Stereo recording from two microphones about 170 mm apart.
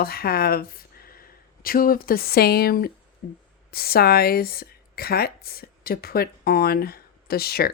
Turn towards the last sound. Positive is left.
turn(degrees=65)  # may be behind; listen again after turning